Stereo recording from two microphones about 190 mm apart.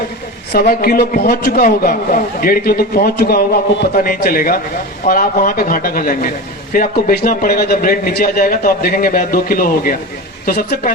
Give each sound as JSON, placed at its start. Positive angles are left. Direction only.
{"t": 0.5, "sound": "a man's voice", "side_deg": 50}